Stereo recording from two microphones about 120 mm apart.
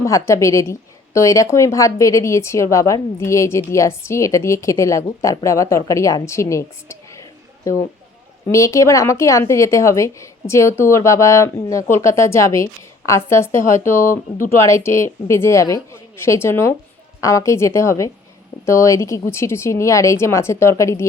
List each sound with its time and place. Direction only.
0.0 s a woman's voice: 25° left (ahead or behind)